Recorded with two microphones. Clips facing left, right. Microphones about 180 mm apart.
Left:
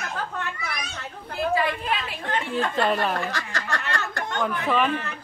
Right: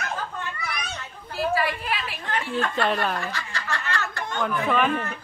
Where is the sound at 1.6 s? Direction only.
20° left (ahead or behind).